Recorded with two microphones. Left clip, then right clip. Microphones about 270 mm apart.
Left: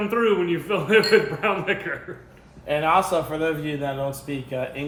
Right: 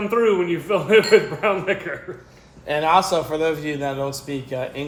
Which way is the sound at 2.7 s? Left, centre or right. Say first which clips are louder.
Right 2 dB; right.